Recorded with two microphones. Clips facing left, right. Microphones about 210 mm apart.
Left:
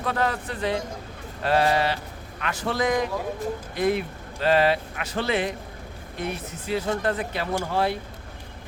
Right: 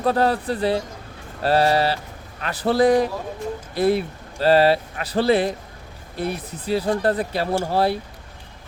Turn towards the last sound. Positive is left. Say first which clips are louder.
# right 4 dB
turn(degrees=-35)  # may be behind; listen again after turning